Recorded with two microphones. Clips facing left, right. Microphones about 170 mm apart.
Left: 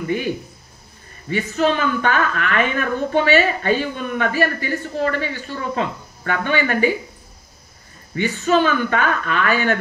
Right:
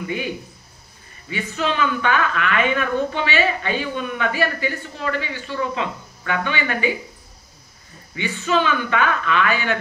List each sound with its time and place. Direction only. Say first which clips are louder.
0.0 s a woman's voice: left 4 dB; 45° left (ahead or behind)
1.3 s a woman's voice: left 5 dB; 40° left (ahead or behind)
8.1 s a woman's voice: left 4 dB; 40° left (ahead or behind)